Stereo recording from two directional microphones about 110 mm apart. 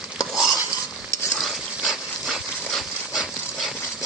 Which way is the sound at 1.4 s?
Centre (ahead or behind).